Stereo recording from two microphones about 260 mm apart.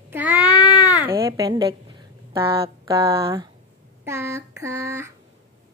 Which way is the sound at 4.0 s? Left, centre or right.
Centre.